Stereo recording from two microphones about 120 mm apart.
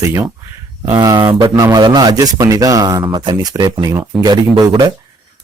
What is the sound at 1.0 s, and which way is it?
A man's voice, 35° right (ahead or behind).